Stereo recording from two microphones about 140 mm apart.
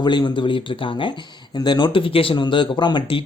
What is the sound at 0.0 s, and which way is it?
Speech, 30° left (ahead or behind).